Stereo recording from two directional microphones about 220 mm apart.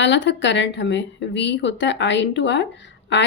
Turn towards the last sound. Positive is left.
turn(degrees=55)  # may be behind; listen again after turning